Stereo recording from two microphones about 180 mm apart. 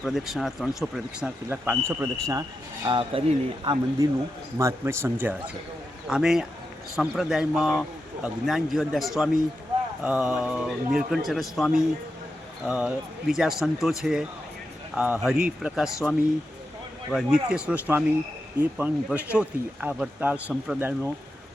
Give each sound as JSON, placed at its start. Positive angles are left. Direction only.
{"t": 0.0, "sound": "speech", "side_deg": 0}
{"t": 1.5, "sound": "speech", "side_deg": -15}
{"t": 2.8, "sound": "speech", "side_deg": -30}